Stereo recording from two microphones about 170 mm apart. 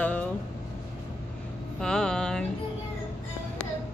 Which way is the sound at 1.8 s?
5° left (ahead or behind).